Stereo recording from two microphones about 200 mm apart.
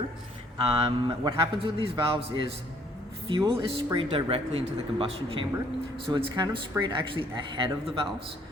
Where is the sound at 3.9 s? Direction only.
30° right (ahead or behind).